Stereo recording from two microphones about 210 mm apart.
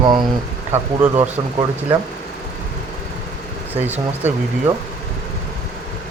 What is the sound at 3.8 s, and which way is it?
Speech, 10° right (ahead or behind).